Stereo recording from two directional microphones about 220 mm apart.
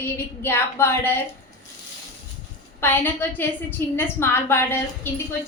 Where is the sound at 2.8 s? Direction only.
10° left (ahead or behind).